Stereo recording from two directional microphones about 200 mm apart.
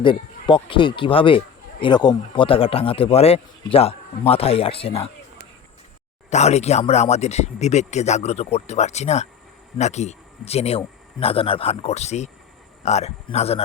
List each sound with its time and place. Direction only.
0.0 s speech: 25° left (ahead or behind)
6.3 s speech: 35° left (ahead or behind)